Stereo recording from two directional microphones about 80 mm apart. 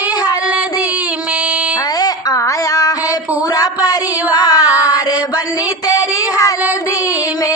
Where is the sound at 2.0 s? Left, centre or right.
Left.